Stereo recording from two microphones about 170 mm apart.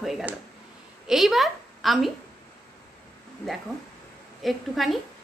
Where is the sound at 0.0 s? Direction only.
5° right (ahead or behind).